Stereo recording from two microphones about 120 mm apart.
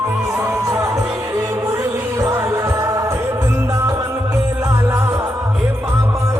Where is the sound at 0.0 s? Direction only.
20° right (ahead or behind).